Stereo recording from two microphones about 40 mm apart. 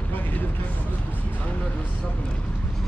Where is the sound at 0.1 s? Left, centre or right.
Left.